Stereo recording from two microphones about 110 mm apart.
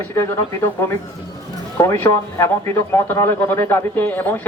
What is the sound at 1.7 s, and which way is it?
A man's voice, 20° left (ahead or behind).